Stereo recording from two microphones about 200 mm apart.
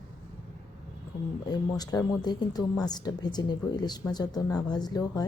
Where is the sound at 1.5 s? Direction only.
20° left (ahead or behind).